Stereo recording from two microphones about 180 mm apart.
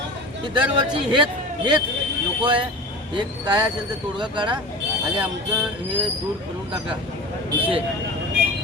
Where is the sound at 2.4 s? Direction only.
30° right (ahead or behind).